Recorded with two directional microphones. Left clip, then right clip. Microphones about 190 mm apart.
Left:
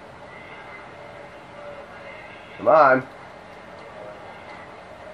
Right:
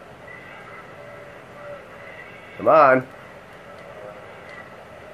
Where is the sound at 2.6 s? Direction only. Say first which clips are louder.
Right 1 dB; 35° right (ahead or behind).